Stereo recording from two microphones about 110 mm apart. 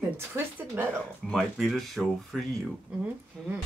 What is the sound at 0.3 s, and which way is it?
Speech, 25° right (ahead or behind).